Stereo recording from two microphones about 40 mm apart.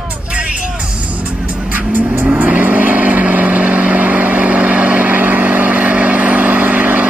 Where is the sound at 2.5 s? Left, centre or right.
Right.